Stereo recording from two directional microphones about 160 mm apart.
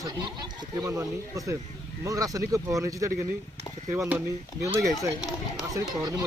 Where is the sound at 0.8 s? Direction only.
20° right (ahead or behind).